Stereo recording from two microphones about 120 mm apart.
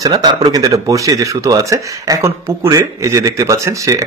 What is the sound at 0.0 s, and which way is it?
A man's voice, 35° right (ahead or behind).